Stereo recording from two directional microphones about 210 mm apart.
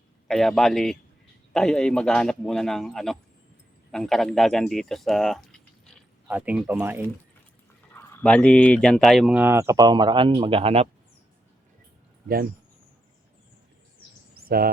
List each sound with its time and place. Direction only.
0.3 s a man's voice: centre (ahead or behind)
7.9 s speech: 10° left (ahead or behind); by 10.8 s 30° right (ahead or behind)
14.3 s a sound: 45° right (ahead or behind)